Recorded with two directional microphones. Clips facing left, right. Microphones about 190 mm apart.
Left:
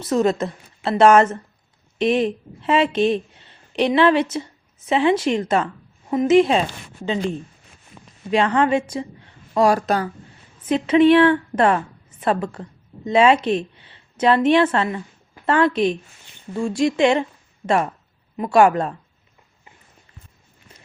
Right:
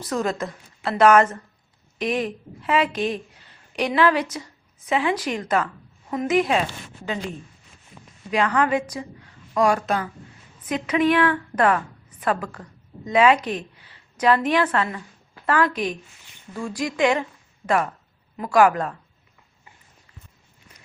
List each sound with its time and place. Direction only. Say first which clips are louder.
0.0 s a woman's voice: left 6 dB; 25° left (ahead or behind)
18.3 s a woman's voice: left 3 dB; 25° left (ahead or behind)